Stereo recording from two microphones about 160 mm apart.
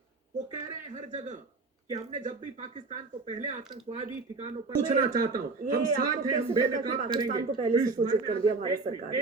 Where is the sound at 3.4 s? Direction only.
50° right (ahead or behind).